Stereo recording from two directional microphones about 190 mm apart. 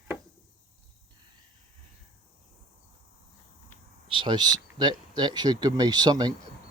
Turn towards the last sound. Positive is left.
turn(degrees=-20)  # may be behind; listen again after turning